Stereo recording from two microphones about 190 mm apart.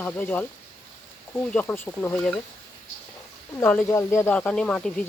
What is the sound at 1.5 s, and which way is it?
Speech, 10° left (ahead or behind).